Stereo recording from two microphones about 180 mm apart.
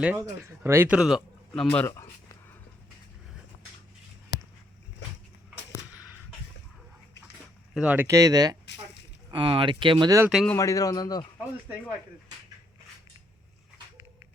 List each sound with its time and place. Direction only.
0.0 s a man's voice: 10° right (ahead or behind); by 1.9 s 10° left (ahead or behind)
1.9 s a sound: 15° left (ahead or behind)
7.7 s speech: 5° right (ahead or behind); by 10.2 s 20° right (ahead or behind)
10.2 s a man's voice: centre (ahead or behind)
10.5 s speech: 20° left (ahead or behind)